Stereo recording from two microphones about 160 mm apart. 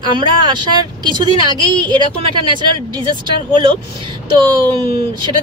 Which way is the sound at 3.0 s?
30° right (ahead or behind).